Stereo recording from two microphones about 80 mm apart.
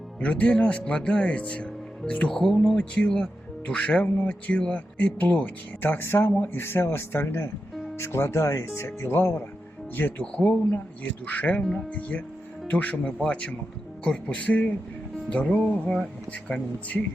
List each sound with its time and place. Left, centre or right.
0.2 s speech: centre
5.8 s speech: left
10.3 s speech: centre
11.6 s speech: centre
11.9 s speech: centre